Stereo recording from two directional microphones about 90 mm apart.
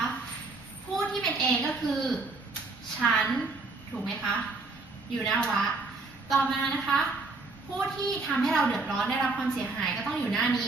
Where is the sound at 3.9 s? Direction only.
20° right (ahead or behind).